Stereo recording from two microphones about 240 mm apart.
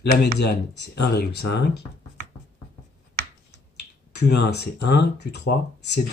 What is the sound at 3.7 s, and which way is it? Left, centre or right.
Speech, left.